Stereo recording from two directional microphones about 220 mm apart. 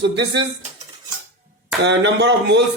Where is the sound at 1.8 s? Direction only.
50° right (ahead or behind).